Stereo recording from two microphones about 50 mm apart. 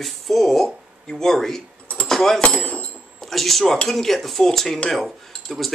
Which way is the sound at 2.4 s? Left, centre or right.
Left.